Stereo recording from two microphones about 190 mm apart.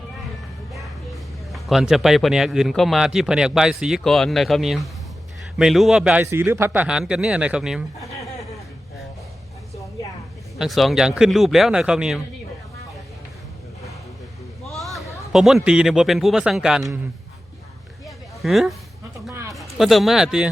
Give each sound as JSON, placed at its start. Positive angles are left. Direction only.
{"t": 0.7, "sound": "a man's voice", "side_deg": 0}
{"t": 10.6, "sound": "speech", "side_deg": 0}
{"t": 14.7, "sound": "speech", "side_deg": 0}
{"t": 18.0, "sound": "a sound", "side_deg": 0}
{"t": 19.3, "sound": "a sound", "side_deg": -15}
{"t": 19.7, "sound": "speech", "side_deg": 0}